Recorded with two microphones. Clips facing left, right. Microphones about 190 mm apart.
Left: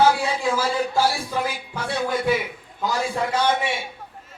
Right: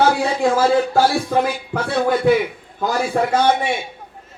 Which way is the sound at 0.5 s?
60° right (ahead or behind).